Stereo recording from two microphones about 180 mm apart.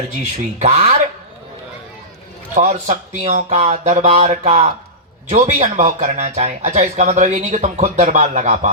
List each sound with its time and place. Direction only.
0.2 s speech: 40° right (ahead or behind)
2.6 s speech: 40° right (ahead or behind)